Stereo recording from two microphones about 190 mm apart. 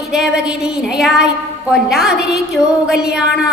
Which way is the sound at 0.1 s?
5° right (ahead or behind).